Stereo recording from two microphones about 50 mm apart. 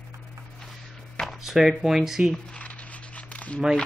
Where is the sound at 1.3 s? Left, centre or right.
Centre.